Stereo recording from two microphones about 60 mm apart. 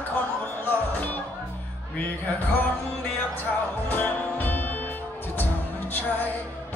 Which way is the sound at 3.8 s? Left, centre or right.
Left.